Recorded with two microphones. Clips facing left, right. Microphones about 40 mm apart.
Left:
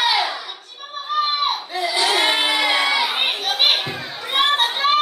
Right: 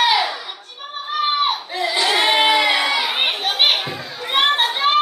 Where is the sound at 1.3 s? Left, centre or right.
Centre.